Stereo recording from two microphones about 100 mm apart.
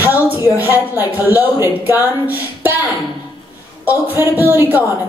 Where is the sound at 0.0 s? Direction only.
20° right (ahead or behind).